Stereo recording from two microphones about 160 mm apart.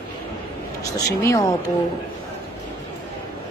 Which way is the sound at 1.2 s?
20° left (ahead or behind).